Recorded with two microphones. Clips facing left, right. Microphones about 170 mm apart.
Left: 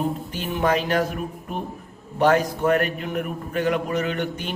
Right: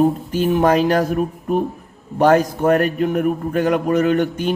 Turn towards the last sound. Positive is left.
turn(degrees=-45)  # may be behind; listen again after turning